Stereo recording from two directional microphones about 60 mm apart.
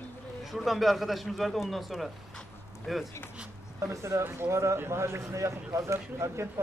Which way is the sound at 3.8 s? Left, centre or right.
Right.